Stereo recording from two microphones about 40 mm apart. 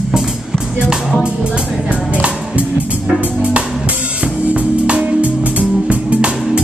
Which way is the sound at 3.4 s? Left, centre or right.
Right.